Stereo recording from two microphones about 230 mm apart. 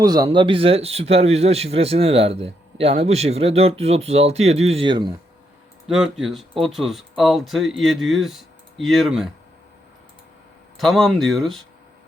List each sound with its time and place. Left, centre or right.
0.0 s speech: centre
5.9 s speech: centre
10.8 s speech: centre